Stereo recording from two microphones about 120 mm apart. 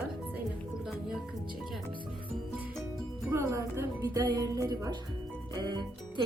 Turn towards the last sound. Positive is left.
turn(degrees=-35)  # may be behind; listen again after turning